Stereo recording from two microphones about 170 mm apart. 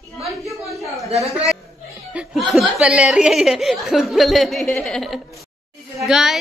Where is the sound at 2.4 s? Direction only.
Centre (ahead or behind).